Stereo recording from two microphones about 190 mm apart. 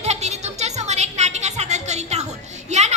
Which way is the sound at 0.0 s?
35° right (ahead or behind).